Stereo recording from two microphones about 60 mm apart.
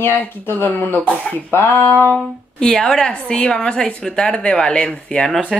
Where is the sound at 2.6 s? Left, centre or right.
Centre.